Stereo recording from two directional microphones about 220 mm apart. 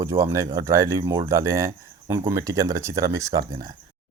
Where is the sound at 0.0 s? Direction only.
15° right (ahead or behind).